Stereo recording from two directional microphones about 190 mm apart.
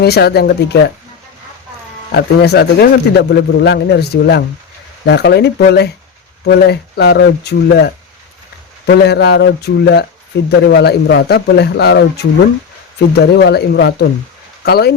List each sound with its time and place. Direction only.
0.0 s speech: 60° left (ahead or behind)
2.1 s speech: 60° left (ahead or behind)
9.0 s speech: 60° left (ahead or behind)